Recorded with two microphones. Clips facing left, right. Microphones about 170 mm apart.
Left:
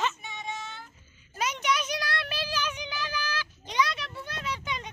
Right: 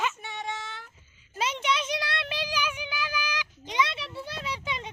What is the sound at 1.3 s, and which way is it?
Child singing, 25° right (ahead or behind).